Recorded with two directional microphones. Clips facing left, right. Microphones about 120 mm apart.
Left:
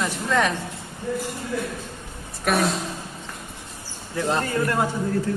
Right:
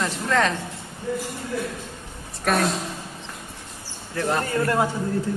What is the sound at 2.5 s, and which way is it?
Speech, 5° left (ahead or behind).